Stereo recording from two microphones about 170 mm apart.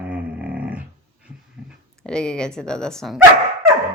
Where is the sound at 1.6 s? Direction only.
5° right (ahead or behind).